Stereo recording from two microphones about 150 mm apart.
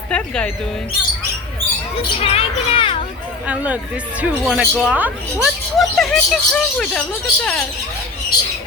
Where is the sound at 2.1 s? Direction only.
40° left (ahead or behind).